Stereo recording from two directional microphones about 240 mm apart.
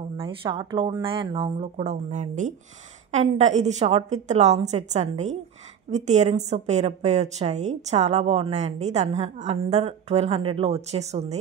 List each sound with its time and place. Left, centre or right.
0.2 s a woman's voice: right